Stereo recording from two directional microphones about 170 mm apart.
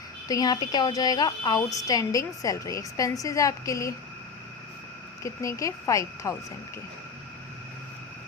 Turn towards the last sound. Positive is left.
turn(degrees=20)  # may be behind; listen again after turning